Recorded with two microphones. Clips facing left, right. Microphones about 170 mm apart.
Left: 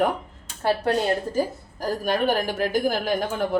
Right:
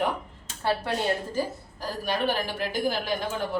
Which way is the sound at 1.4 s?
50° left (ahead or behind).